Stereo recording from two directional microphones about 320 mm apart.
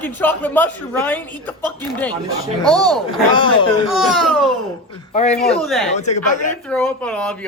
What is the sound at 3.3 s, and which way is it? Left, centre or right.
Speech, centre.